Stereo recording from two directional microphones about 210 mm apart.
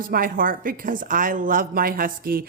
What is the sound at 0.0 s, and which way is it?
A woman's voice, 45° right (ahead or behind).